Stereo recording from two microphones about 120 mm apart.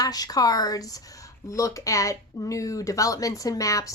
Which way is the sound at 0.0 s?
30° left (ahead or behind).